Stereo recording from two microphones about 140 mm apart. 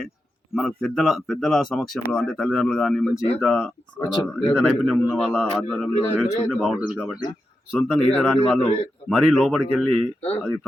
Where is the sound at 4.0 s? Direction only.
20° left (ahead or behind).